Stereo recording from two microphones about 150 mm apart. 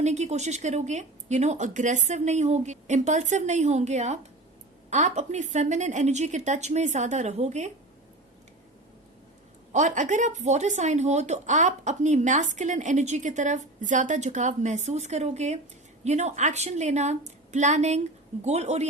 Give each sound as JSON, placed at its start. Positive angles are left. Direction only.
{"t": 0.0, "sound": "speech", "side_deg": -50}
{"t": 9.7, "sound": "speech", "side_deg": -55}